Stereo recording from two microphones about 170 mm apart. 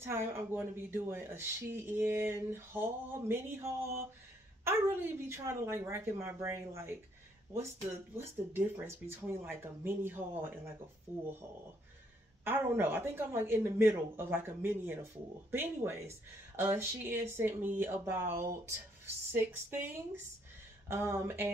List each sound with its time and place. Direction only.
0.0 s speech: 15° right (ahead or behind)
12.4 s speech: 15° right (ahead or behind)
20.9 s speech: 15° right (ahead or behind)